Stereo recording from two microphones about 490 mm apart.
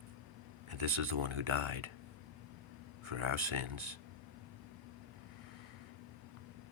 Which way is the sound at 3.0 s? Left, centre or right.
Right.